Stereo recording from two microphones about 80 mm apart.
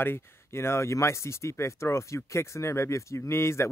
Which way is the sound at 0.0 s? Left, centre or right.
Left.